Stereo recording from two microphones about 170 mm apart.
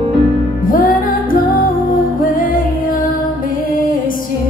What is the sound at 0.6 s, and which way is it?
Music, 55° left (ahead or behind).